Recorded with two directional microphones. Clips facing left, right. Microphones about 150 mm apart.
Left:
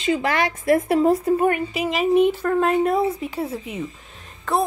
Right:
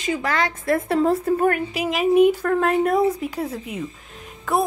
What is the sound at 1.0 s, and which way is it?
A woman's voice, 5° left (ahead or behind).